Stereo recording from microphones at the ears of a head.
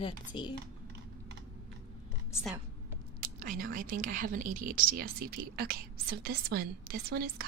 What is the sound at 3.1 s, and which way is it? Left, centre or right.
A woman's voice, right.